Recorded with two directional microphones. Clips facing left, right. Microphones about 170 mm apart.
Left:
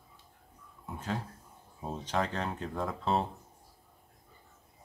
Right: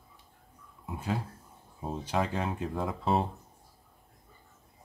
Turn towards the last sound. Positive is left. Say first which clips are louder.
# right 2 dB
turn(degrees=0)  # may be behind; listen again after turning